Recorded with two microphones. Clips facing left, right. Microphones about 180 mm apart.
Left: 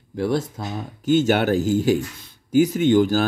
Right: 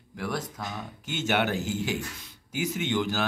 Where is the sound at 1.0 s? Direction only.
40° left (ahead or behind).